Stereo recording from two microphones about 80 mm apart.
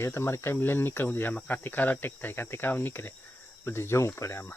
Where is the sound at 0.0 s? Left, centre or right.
Left.